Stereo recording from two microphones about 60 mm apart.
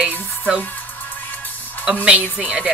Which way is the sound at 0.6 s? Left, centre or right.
Left.